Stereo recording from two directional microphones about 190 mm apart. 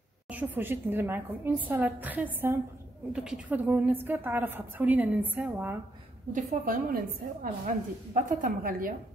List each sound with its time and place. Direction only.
0.3 s a woman's voice: 10° right (ahead or behind)
6.3 s a woman's voice: 50° right (ahead or behind)